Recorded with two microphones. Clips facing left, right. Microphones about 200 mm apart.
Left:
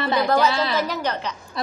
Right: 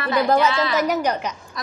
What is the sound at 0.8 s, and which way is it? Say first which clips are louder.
Speech: right 5 dB; 15° right (ahead or behind).